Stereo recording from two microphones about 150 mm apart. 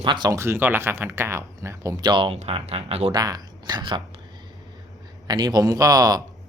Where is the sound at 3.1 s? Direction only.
25° right (ahead or behind).